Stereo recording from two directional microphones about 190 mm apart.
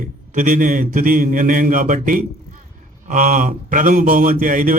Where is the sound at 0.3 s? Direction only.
45° right (ahead or behind).